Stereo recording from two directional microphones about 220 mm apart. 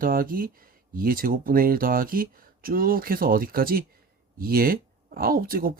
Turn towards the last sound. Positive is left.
turn(degrees=-40)  # may be behind; listen again after turning